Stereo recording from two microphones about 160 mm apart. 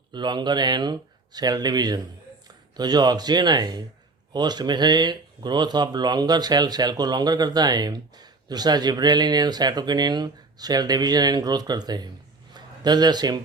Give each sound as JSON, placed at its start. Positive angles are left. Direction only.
{"t": 0.1, "sound": "a man's voice", "side_deg": -30}